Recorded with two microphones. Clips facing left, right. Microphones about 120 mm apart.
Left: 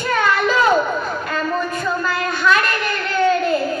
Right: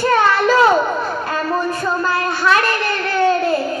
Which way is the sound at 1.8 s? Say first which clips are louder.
Right 2 dB; 30° right (ahead or behind).